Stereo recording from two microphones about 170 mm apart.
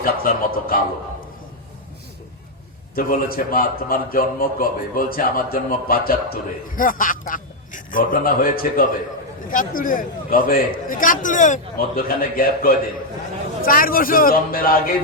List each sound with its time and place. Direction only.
0.0 s a man's voice: 60° left (ahead or behind)
2.9 s a man's voice: 55° left (ahead or behind)